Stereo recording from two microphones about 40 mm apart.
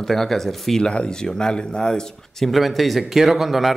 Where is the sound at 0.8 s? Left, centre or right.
Left.